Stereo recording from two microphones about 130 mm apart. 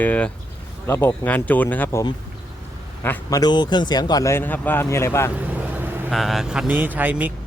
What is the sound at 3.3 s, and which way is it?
Speech, 30° left (ahead or behind).